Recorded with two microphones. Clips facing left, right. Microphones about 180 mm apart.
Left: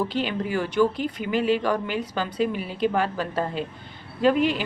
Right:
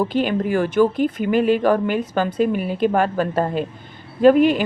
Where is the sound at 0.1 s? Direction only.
50° right (ahead or behind).